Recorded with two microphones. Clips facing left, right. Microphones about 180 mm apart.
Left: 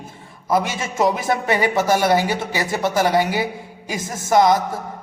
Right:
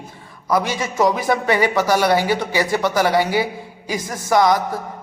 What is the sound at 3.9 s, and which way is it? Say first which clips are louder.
Speech: left 1 dB; 25° left (ahead or behind).